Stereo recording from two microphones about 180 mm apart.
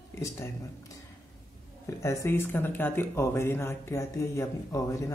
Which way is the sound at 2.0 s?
15° left (ahead or behind).